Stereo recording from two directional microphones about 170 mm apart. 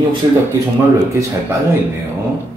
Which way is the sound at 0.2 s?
30° right (ahead or behind).